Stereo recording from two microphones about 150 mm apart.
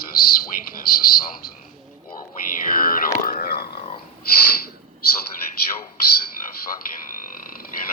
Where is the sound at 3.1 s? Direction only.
75° left (ahead or behind).